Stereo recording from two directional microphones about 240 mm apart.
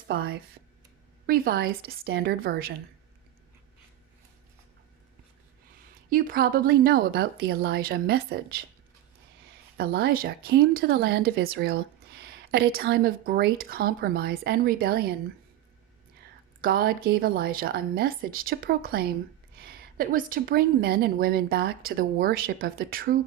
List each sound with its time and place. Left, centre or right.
0.1 s a woman's voice: right
5.9 s a woman's voice: right
9.7 s a woman's voice: right
16.6 s a woman's voice: right